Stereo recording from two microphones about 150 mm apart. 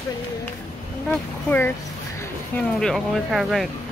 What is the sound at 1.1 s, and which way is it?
Speech, 10° left (ahead or behind).